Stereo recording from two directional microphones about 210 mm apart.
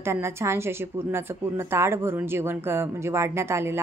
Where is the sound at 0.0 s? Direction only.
10° right (ahead or behind).